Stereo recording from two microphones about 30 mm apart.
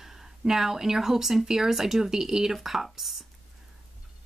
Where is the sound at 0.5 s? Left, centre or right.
Centre.